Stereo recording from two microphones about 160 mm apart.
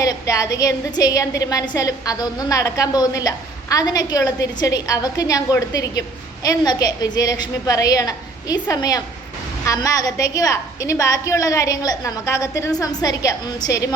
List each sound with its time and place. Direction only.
0.0 s a woman's voice: 20° left (ahead or behind)